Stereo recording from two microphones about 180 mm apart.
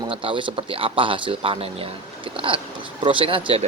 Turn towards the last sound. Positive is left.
turn(degrees=-30)  # may be behind; listen again after turning